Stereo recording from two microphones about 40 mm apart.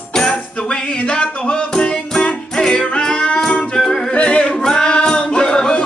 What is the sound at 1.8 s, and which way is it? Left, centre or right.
Music, left.